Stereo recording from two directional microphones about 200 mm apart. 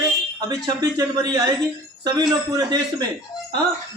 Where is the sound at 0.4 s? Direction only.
20° right (ahead or behind).